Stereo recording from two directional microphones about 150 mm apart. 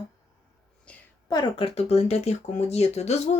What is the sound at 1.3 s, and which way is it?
Speech, 30° left (ahead or behind).